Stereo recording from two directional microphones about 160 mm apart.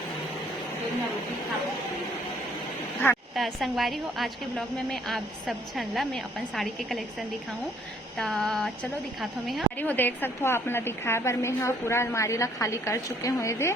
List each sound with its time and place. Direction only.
3.3 s a woman's voice: centre (ahead or behind)
8.2 s a woman's voice: 5° left (ahead or behind)
9.8 s a woman's voice: 10° left (ahead or behind)